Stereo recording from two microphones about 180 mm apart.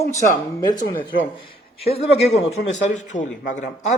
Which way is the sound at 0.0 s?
15° left (ahead or behind).